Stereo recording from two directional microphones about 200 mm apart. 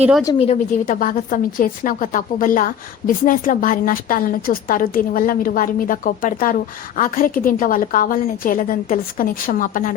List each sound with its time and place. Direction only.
0.0 s a woman's voice: 5° right (ahead or behind)
0.3 s a woman's voice: 35° left (ahead or behind)